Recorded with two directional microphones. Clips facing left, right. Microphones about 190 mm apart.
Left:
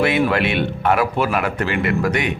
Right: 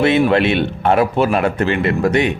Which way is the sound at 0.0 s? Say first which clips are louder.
Right 4 dB; 25° right (ahead or behind).